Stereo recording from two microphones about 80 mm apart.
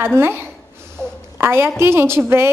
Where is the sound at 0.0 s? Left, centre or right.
Right.